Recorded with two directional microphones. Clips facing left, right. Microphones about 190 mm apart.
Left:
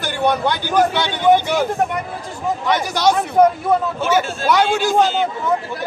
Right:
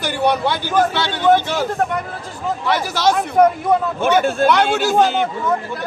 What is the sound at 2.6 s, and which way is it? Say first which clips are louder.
Speech: even; 5° right (ahead or behind).